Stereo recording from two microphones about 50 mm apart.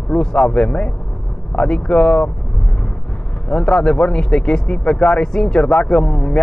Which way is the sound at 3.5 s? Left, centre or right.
Centre.